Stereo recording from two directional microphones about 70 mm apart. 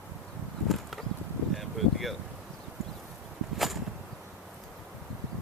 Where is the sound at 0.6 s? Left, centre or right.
Centre.